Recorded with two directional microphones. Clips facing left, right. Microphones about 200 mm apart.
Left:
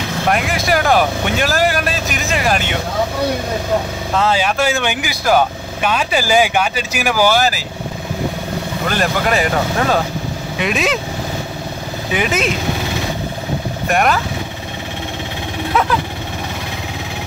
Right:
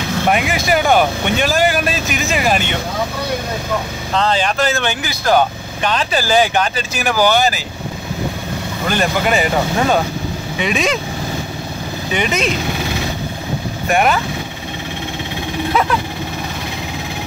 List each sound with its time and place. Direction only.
0.3 s speech: centre (ahead or behind)
4.1 s speech: 10° left (ahead or behind)
8.8 s speech: centre (ahead or behind)
12.1 s speech: 5° left (ahead or behind)
13.8 s speech: centre (ahead or behind)